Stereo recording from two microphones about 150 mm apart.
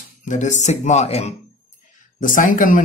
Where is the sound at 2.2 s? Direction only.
60° left (ahead or behind).